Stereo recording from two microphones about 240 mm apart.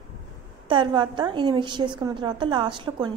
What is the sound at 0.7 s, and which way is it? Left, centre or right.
A woman's voice, centre.